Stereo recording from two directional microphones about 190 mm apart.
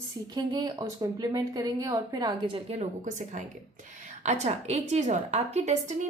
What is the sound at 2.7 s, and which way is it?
A woman's voice, 35° right (ahead or behind).